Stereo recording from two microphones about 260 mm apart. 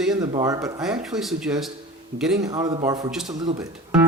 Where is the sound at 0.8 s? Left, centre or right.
Centre.